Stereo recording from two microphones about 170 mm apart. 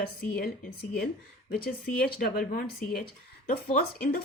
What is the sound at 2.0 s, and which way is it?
Speech, 60° left (ahead or behind).